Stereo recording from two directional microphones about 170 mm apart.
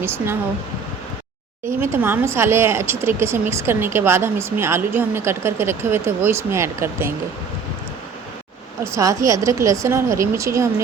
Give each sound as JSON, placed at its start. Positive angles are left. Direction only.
{"t": 1.8, "sound": "speech", "side_deg": -15}
{"t": 8.8, "sound": "speech", "side_deg": -20}